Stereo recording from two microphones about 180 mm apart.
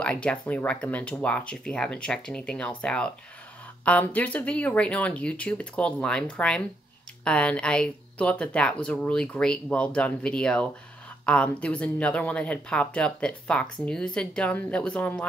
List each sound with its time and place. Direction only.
0.0 s speech: 5° left (ahead or behind)